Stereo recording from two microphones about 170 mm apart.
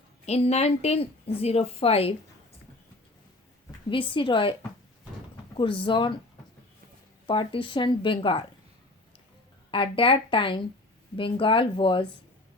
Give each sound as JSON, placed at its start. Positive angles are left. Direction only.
{"t": 0.3, "sound": "speech", "side_deg": 40}
{"t": 3.8, "sound": "speech", "side_deg": 30}
{"t": 5.5, "sound": "speech", "side_deg": 30}
{"t": 7.3, "sound": "speech", "side_deg": 30}
{"t": 9.7, "sound": "speech", "side_deg": 30}